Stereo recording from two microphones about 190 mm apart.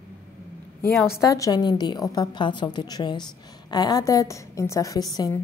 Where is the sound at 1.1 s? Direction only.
15° left (ahead or behind).